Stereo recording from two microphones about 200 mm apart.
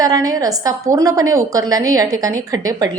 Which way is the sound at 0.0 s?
20° right (ahead or behind).